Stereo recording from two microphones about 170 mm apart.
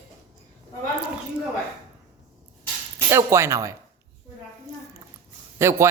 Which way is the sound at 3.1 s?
15° right (ahead or behind).